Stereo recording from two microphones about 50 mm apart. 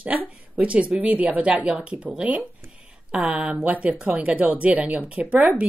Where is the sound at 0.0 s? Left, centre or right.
Right.